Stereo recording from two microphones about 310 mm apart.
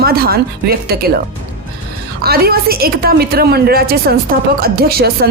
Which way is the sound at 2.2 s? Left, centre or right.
Right.